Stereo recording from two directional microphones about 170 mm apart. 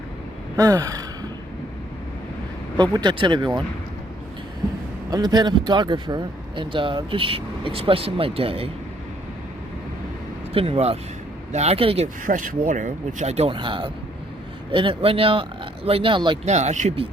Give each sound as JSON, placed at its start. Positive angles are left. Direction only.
{"t": 0.6, "sound": "speech", "side_deg": -20}
{"t": 2.7, "sound": "speech", "side_deg": -25}
{"t": 5.1, "sound": "speech", "side_deg": -25}
{"t": 10.5, "sound": "speech", "side_deg": -35}
{"t": 12.2, "sound": "speech", "side_deg": -50}
{"t": 16.5, "sound": "speech", "side_deg": -40}